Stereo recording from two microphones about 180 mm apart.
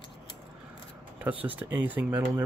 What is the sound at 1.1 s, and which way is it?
Speech, 10° right (ahead or behind).